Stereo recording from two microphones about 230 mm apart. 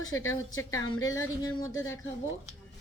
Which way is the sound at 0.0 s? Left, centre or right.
Left.